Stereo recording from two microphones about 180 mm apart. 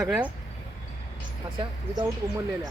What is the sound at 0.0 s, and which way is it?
Speech, 10° right (ahead or behind).